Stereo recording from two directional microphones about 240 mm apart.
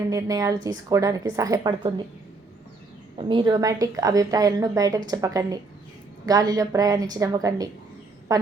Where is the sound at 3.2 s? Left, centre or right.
Right.